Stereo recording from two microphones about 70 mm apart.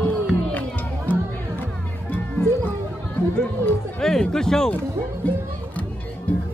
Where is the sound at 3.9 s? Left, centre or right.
Centre.